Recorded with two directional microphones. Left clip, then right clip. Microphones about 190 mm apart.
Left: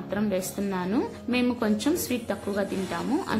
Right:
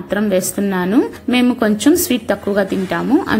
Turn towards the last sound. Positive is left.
turn(degrees=-20)  # may be behind; listen again after turning